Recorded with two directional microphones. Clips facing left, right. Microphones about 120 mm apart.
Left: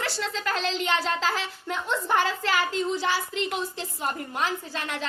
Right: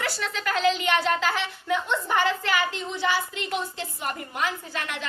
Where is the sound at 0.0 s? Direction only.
30° left (ahead or behind).